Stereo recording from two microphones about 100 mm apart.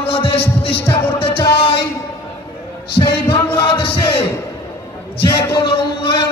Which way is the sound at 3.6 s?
55° left (ahead or behind).